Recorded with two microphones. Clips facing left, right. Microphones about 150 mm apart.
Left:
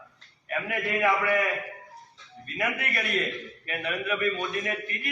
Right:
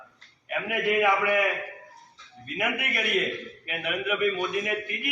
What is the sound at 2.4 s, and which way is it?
A man's voice, 15° right (ahead or behind).